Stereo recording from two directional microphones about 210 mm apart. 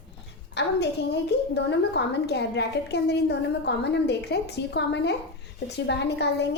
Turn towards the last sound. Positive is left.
turn(degrees=55)  # may be behind; listen again after turning